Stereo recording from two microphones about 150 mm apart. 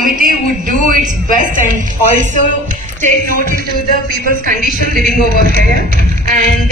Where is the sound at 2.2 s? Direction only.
60° right (ahead or behind).